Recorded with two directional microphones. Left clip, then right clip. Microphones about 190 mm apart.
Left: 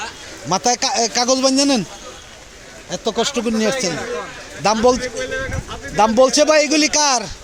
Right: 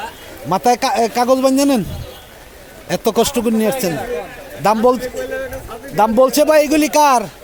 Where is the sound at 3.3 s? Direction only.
15° right (ahead or behind).